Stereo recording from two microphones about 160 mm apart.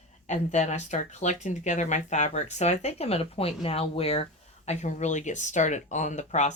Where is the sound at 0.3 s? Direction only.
45° left (ahead or behind).